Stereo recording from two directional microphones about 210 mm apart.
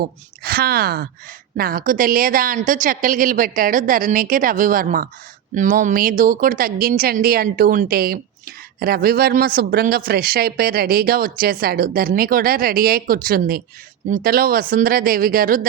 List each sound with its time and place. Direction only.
0.0 s a woman's voice: 45° right (ahead or behind)